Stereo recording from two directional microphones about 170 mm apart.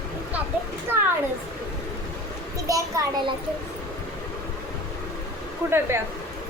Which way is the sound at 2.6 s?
20° right (ahead or behind).